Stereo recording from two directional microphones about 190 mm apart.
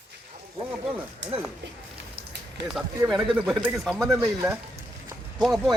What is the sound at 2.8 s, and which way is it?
Speech, centre (ahead or behind).